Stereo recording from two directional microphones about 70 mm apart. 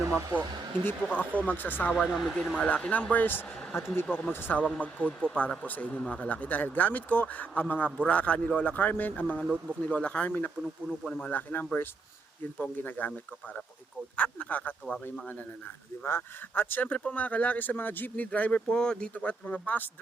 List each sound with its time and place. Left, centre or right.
0.5 s speech: right
1.0 s speech: left
2.0 s speech: centre
2.6 s speech: centre; by 4.6 s left
4.6 s speech: left
10.8 s speech: centre
11.3 s speech: left
14.2 s speech: left
16.0 s speech: left